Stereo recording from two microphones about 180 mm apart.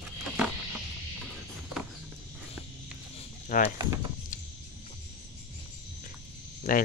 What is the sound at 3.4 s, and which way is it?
Speech, 45° left (ahead or behind).